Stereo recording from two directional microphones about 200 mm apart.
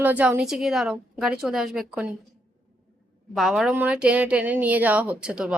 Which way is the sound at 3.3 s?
Centre (ahead or behind).